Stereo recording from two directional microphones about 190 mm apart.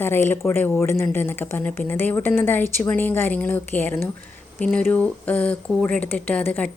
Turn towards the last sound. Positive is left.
turn(degrees=10)  # may be behind; listen again after turning